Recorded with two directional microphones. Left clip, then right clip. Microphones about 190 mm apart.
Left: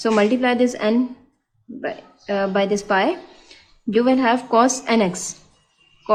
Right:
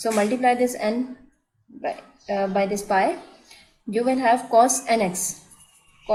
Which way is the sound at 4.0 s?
50° left (ahead or behind).